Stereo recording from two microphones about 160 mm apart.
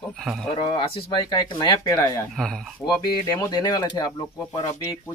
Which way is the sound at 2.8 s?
25° left (ahead or behind).